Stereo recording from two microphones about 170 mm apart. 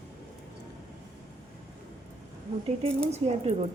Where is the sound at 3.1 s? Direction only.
40° right (ahead or behind).